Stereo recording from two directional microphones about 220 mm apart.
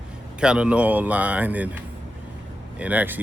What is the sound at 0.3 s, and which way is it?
Speech, 5° right (ahead or behind).